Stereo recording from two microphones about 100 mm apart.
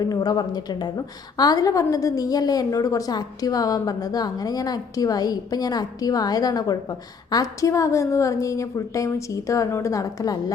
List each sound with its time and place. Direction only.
0.0 s a woman's voice: 40° left (ahead or behind)